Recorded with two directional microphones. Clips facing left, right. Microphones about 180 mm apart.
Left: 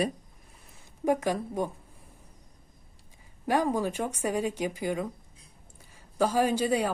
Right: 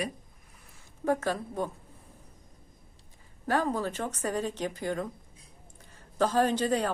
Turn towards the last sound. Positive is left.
turn(degrees=10)  # may be behind; listen again after turning